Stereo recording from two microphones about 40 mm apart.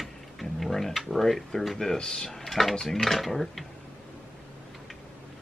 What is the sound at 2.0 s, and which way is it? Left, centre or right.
Speech, centre.